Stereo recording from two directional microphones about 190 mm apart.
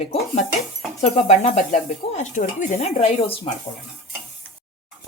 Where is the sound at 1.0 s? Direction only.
35° left (ahead or behind).